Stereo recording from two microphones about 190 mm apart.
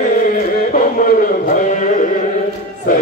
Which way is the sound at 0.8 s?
45° left (ahead or behind).